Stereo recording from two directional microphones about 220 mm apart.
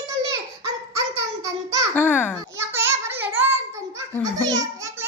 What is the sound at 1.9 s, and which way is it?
Speech, 10° left (ahead or behind).